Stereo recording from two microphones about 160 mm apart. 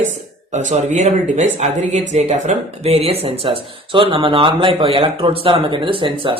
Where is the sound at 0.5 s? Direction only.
45° right (ahead or behind).